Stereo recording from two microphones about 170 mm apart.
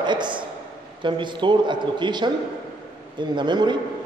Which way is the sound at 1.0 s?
30° right (ahead or behind).